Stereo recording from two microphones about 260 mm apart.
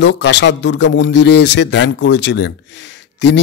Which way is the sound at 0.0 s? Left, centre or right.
Left.